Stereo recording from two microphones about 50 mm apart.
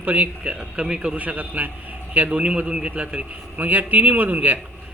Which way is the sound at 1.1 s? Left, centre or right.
Right.